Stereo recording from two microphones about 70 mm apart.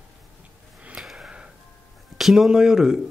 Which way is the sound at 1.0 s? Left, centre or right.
Centre.